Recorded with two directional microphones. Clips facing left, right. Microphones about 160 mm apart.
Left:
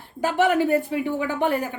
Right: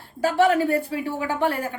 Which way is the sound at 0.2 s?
20° left (ahead or behind).